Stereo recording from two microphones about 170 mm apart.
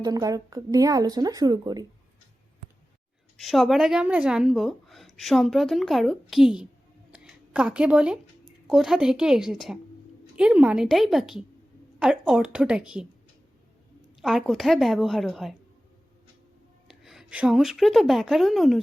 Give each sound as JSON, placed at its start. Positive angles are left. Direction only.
{"t": 0.0, "sound": "speech", "side_deg": -20}
{"t": 3.3, "sound": "a woman's voice", "side_deg": 0}
{"t": 7.1, "sound": "a sound", "side_deg": -5}
{"t": 8.6, "sound": "a woman's voice", "side_deg": 0}
{"t": 14.2, "sound": "a woman's voice", "side_deg": 0}
{"t": 16.9, "sound": "a woman's voice", "side_deg": 0}